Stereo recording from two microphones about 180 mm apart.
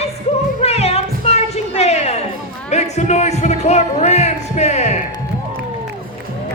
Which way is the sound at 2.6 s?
40° left (ahead or behind).